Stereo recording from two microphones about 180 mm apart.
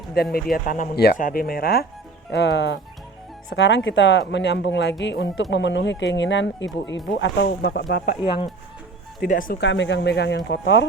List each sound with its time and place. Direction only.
0.1 s speech: 60° left (ahead or behind)
2.3 s speech: 80° left; by 8.1 s 65° left (ahead or behind)
8.2 s speech: 30° left (ahead or behind)
9.2 s speech: 50° left (ahead or behind)
9.6 s speech: 85° left